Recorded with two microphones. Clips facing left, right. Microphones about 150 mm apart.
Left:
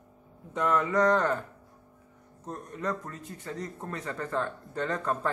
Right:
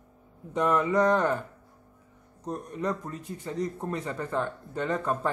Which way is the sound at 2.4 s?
15° right (ahead or behind).